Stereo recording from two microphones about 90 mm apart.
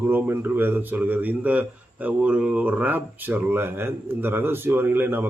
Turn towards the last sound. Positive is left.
turn(degrees=-25)  # may be behind; listen again after turning